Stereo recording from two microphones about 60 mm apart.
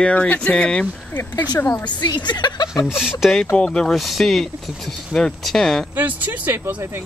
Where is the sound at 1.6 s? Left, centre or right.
Left.